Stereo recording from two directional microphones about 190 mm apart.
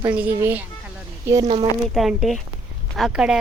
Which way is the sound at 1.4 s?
30° right (ahead or behind).